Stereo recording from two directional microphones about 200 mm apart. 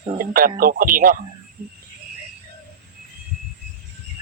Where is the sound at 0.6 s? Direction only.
45° right (ahead or behind).